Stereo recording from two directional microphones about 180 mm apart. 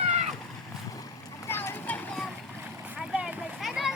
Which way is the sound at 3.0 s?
5° right (ahead or behind).